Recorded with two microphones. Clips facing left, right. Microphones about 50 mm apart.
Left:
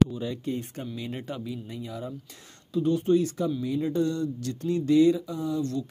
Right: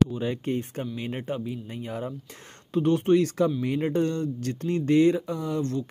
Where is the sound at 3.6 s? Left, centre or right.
Right.